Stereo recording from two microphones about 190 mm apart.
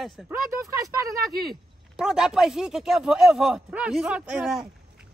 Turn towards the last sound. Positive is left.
turn(degrees=-5)  # may be behind; listen again after turning